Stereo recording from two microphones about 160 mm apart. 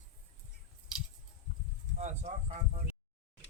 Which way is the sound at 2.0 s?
45° right (ahead or behind).